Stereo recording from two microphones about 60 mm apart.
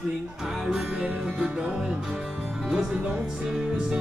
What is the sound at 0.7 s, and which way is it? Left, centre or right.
Music, centre.